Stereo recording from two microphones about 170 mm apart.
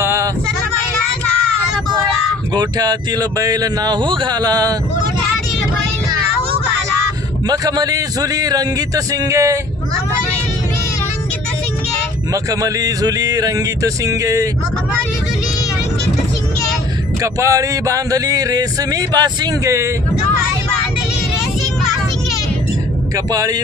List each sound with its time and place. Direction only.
0.0 s a sound: 15° right (ahead or behind)
2.5 s speech: 25° right (ahead or behind)
7.4 s speech: 20° right (ahead or behind)
12.4 s speech: 20° right (ahead or behind)
17.2 s speech: 20° right (ahead or behind)
23.1 s speech: 20° right (ahead or behind)